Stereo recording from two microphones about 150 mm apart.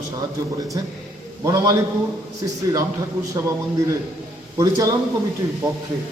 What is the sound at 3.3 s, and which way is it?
A man's voice, 20° right (ahead or behind).